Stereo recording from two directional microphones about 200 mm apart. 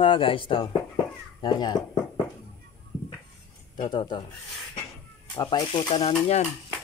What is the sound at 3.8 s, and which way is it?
Speech, 25° left (ahead or behind).